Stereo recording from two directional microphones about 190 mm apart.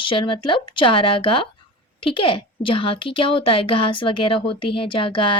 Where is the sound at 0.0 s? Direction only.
25° left (ahead or behind).